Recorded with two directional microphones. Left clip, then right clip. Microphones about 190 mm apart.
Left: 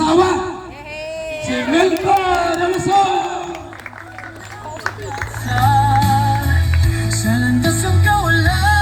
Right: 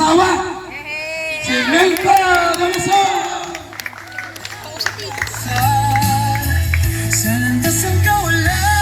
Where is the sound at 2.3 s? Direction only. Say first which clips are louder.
Right 2 dB; 25° right (ahead or behind).